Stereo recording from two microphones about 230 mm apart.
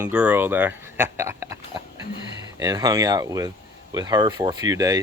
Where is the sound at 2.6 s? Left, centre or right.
Centre.